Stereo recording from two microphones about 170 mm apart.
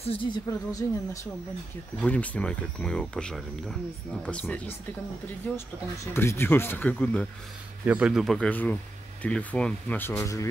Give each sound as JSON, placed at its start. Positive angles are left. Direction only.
{"t": 0.0, "sound": "speech", "side_deg": 30}
{"t": 0.5, "sound": "a woman's voice", "side_deg": 20}
{"t": 2.0, "sound": "speech", "side_deg": 10}
{"t": 7.8, "sound": "speech", "side_deg": -5}